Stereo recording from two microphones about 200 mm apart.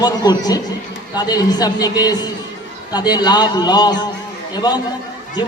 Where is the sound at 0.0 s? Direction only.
20° left (ahead or behind).